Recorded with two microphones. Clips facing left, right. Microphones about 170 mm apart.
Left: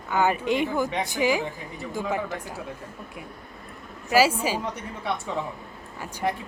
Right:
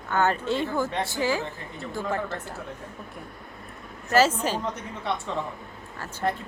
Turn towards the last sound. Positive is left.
turn(degrees=15)  # may be behind; listen again after turning